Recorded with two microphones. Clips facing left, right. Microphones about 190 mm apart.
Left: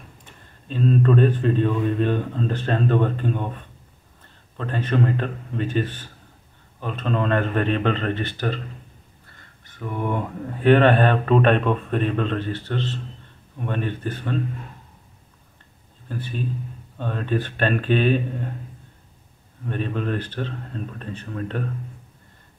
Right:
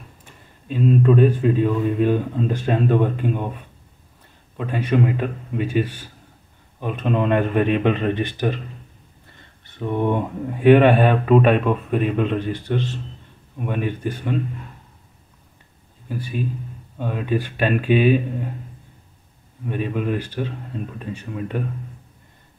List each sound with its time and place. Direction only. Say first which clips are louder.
0.2 s speech: right 1 dB; 10° right (ahead or behind)
16.1 s speech: right 2 dB; 10° right (ahead or behind)
19.6 s speech: right 2 dB; 10° right (ahead or behind)